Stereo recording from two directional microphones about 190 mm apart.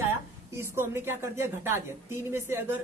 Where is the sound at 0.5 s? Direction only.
15° right (ahead or behind).